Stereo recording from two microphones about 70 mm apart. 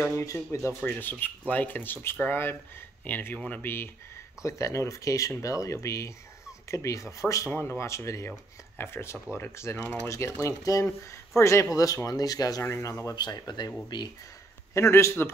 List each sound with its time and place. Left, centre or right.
0.1 s speech: left
0.9 s speech: left
4.4 s speech: left
8.3 s speech: left
11.7 s speech: left
13.1 s speech: left
14.7 s speech: left